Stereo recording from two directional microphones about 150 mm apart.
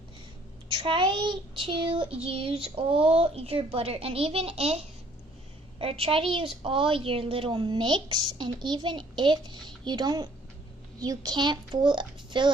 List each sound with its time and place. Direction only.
0.7 s a woman's voice: 35° right (ahead or behind)
5.8 s a woman's voice: 40° right (ahead or behind)